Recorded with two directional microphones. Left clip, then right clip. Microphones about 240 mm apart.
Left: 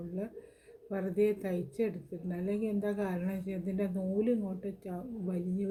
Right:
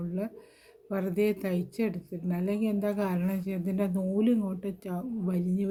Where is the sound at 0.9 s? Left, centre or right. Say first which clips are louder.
Right 2 dB; right.